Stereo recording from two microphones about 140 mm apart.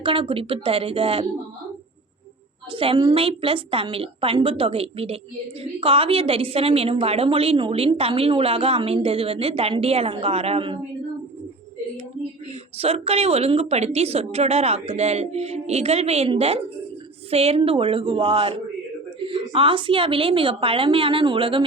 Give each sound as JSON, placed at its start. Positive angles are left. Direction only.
{"t": 0.0, "sound": "a woman's voice", "side_deg": -40}
{"t": 2.7, "sound": "a woman's voice", "side_deg": -35}
{"t": 12.7, "sound": "a woman's voice", "side_deg": -45}